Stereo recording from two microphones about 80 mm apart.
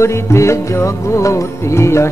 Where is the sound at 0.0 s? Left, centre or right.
Left.